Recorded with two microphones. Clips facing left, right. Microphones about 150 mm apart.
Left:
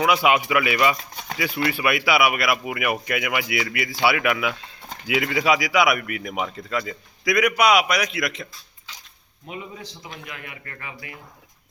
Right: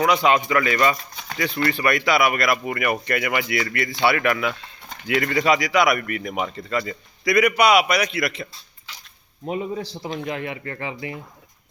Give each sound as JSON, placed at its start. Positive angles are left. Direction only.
{"t": 0.0, "sound": "speech", "side_deg": 10}
{"t": 9.5, "sound": "speech", "side_deg": -40}